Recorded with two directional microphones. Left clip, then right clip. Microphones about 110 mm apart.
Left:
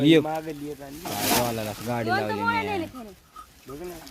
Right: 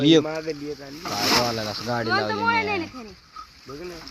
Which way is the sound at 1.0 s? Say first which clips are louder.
Right 3 dB; 30° left (ahead or behind).